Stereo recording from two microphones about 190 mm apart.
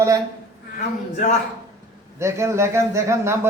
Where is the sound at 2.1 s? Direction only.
15° right (ahead or behind).